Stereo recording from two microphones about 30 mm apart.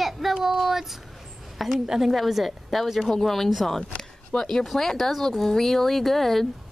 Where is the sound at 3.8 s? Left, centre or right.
Left.